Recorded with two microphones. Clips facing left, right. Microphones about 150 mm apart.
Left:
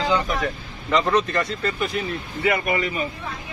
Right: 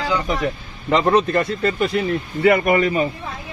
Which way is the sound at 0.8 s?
40° right (ahead or behind).